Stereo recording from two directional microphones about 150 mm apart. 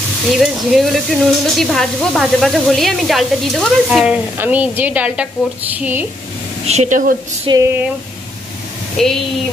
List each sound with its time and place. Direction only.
0.3 s speech: centre (ahead or behind)
6.7 s a woman's voice: 55° right (ahead or behind)
7.5 s speech: 30° right (ahead or behind)
9.0 s speech: 5° left (ahead or behind)